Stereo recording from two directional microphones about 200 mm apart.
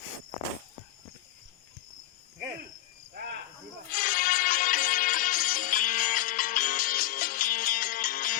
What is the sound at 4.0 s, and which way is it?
Music, 45° left (ahead or behind).